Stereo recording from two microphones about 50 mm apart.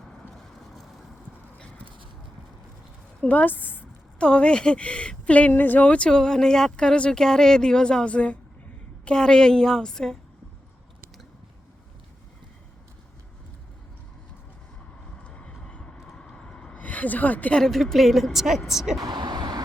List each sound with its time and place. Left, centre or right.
3.2 s a woman's voice: left
4.2 s a woman's voice: centre
6.1 s speech: centre
9.0 s speech: centre
15.2 s vehicle: left
15.6 s train: left
16.1 s vehicle: centre
16.7 s a sound: left
17.5 s a woman's voice: centre